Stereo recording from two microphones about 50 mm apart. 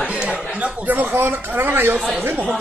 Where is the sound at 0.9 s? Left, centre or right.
Right.